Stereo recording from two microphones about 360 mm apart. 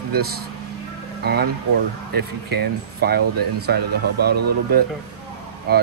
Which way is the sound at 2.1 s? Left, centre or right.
Right.